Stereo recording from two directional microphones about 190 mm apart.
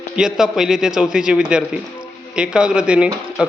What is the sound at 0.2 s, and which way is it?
A man's voice, 5° right (ahead or behind).